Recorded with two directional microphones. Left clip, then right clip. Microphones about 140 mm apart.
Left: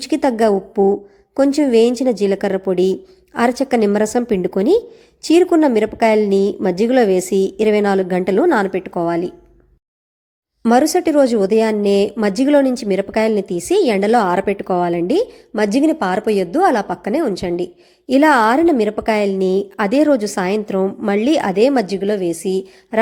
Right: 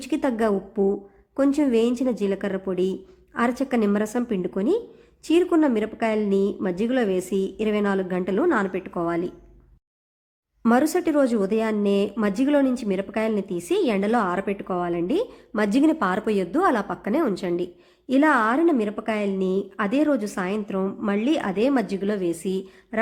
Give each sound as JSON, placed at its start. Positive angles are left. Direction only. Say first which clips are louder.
{"t": 0.0, "sound": "a woman's voice", "louder": "left 8 dB", "side_deg": 25}
{"t": 10.6, "sound": "speech", "louder": "left 7 dB", "side_deg": 20}